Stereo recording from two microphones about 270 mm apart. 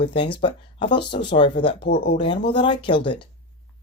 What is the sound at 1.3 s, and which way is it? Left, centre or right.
Speech, centre.